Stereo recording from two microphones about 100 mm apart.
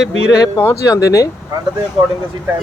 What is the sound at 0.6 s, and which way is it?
Speech, 30° left (ahead or behind).